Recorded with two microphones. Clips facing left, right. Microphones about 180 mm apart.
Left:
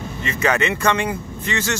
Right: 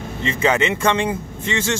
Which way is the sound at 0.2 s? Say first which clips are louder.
Right 2 dB; 25° right (ahead or behind).